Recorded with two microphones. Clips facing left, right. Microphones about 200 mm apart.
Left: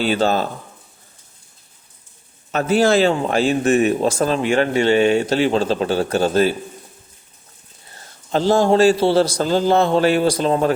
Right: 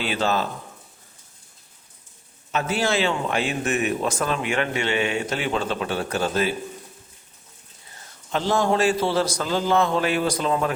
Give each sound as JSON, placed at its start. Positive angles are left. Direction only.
{"t": 0.0, "sound": "speech", "side_deg": 35}
{"t": 2.5, "sound": "speech", "side_deg": 40}
{"t": 7.9, "sound": "speech", "side_deg": 35}